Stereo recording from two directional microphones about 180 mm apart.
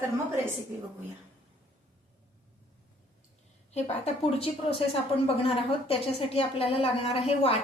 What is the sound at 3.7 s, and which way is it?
A woman's voice, 35° left (ahead or behind).